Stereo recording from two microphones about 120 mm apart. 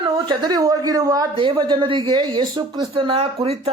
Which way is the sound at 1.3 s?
45° right (ahead or behind).